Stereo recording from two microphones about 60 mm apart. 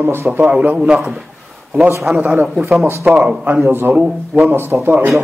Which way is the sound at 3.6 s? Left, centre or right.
Right.